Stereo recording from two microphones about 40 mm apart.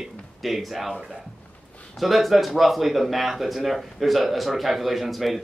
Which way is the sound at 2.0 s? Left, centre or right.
Centre.